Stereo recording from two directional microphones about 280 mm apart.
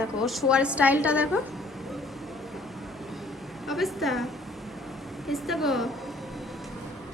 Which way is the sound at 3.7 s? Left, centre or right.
Centre.